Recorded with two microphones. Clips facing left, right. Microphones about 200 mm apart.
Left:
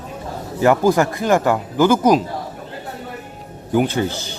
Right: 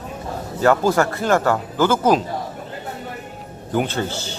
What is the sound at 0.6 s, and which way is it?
Speech, 15° left (ahead or behind).